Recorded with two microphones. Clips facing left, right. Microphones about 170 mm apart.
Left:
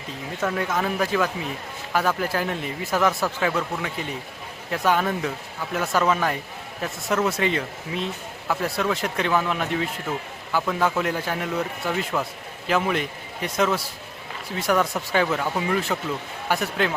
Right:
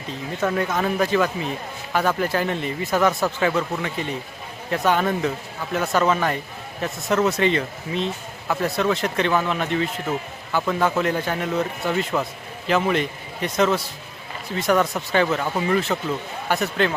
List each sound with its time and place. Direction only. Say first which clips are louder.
0.4 s a man's voice: right 2 dB; centre (ahead or behind)